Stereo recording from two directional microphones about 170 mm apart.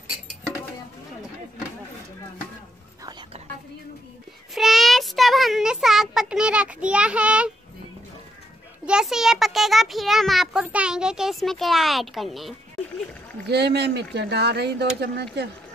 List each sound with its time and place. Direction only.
4.6 s child singing: centre (ahead or behind)
8.8 s a child's voice: 5° right (ahead or behind)
13.5 s speech: 80° right